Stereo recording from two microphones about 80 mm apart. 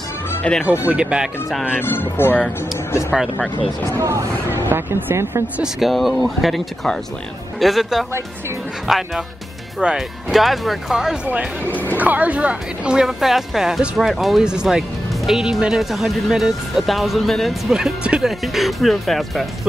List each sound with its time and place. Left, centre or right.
0.7 s speech: centre
1.8 s speech: left
4.0 s speech: right
4.5 s speech: right
5.6 s speech: centre
11.2 s speech: centre
11.7 s a sound: left
12.0 s speech: centre